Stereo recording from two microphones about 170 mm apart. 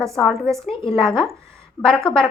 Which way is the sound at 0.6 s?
30° left (ahead or behind).